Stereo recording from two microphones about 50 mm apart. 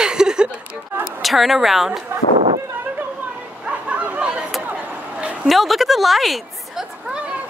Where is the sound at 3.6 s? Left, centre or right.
Right.